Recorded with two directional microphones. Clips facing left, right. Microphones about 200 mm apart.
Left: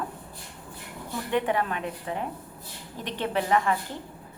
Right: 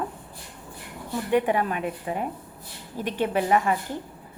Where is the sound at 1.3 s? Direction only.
10° right (ahead or behind).